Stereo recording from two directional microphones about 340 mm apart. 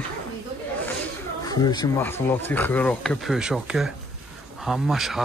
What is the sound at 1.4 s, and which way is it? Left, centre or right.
Speech, centre.